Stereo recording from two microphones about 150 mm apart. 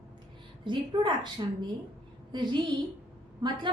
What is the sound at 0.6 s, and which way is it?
A woman's voice, 30° right (ahead or behind).